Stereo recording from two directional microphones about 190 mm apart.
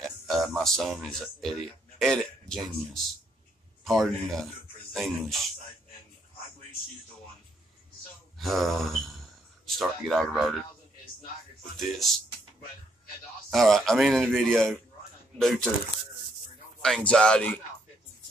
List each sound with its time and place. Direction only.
0.0 s a man's voice: centre (ahead or behind)
8.4 s speech: centre (ahead or behind)
11.7 s speech: centre (ahead or behind)
13.5 s speech: centre (ahead or behind)
16.8 s speech: 5° left (ahead or behind)